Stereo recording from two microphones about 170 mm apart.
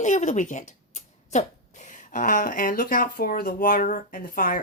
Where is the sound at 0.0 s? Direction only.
45° left (ahead or behind).